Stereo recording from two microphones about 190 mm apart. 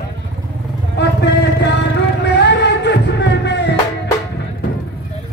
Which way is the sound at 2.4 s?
65° left (ahead or behind).